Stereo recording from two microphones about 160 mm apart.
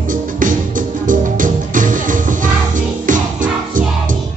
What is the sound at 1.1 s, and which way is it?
Music, 55° right (ahead or behind).